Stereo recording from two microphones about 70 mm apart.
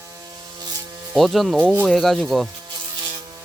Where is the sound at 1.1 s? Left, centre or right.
Centre.